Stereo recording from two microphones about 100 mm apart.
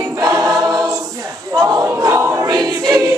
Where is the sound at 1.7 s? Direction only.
30° right (ahead or behind).